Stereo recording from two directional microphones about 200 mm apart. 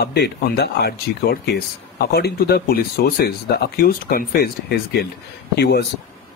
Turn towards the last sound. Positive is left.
turn(degrees=55)  # may be behind; listen again after turning